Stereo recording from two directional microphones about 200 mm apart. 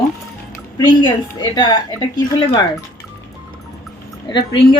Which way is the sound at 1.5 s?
20° left (ahead or behind).